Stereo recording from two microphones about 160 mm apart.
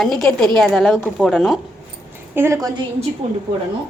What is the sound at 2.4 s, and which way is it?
Speech, 15° right (ahead or behind).